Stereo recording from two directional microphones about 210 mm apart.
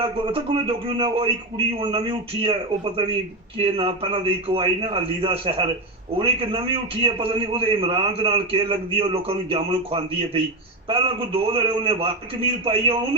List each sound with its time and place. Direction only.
0.0 s a man's voice: 25° right (ahead or behind)